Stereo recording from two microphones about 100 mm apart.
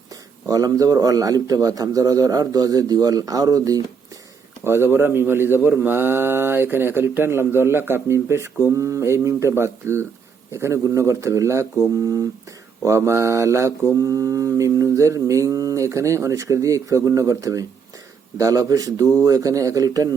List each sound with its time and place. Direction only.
0.1 s mantra: 35° right (ahead or behind)
4.6 s speech: 25° right (ahead or behind)
12.8 s mantra: 30° right (ahead or behind)